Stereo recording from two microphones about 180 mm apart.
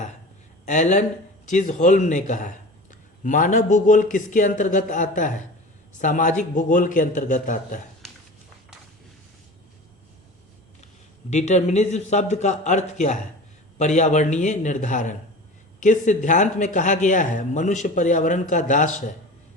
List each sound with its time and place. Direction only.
0.6 s speech: 45° left (ahead or behind)
11.3 s a man's voice: 40° left (ahead or behind)